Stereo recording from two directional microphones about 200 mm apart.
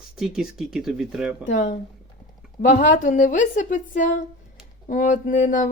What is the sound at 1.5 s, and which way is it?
A woman's voice, 40° left (ahead or behind).